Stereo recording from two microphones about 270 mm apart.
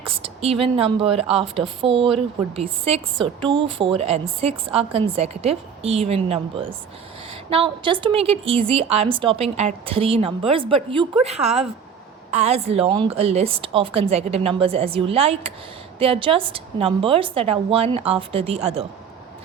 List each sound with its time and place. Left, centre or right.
0.0 s a woman's voice: right